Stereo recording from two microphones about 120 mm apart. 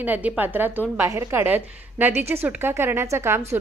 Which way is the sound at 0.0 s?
15° right (ahead or behind).